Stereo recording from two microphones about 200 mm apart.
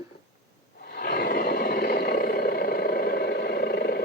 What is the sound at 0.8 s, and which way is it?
Roar, 55° left (ahead or behind).